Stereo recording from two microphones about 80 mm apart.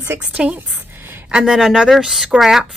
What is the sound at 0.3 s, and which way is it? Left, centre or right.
Speech, centre.